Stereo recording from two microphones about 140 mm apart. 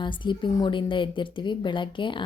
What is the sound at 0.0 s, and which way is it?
A woman's voice, 35° left (ahead or behind).